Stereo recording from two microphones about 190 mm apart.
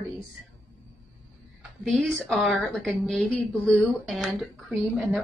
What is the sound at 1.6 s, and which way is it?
A woman's voice, centre (ahead or behind).